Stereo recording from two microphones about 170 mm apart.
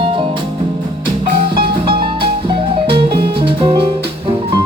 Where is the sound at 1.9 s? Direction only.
65° right (ahead or behind).